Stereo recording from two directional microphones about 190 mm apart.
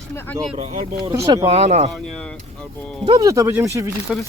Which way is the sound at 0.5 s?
35° right (ahead or behind).